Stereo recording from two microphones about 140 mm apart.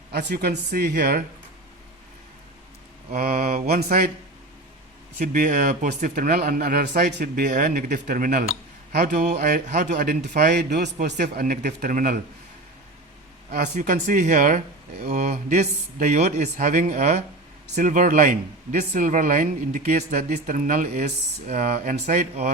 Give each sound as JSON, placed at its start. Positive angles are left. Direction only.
{"t": 0.3, "sound": "mantra", "side_deg": -90}
{"t": 3.1, "sound": "mantra", "side_deg": -90}
{"t": 5.3, "sound": "a man's voice", "side_deg": -80}
{"t": 10.9, "sound": "speech", "side_deg": -90}
{"t": 13.5, "sound": "a man's voice", "side_deg": -65}
{"t": 20.2, "sound": "speech", "side_deg": -65}
{"t": 21.5, "sound": "speech", "side_deg": -75}